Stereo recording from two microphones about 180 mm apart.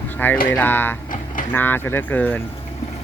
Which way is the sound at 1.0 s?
45° left (ahead or behind).